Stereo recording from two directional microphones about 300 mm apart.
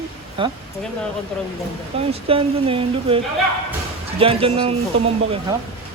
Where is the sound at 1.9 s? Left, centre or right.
Centre.